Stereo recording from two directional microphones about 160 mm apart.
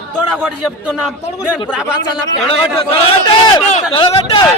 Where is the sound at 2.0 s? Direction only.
30° left (ahead or behind).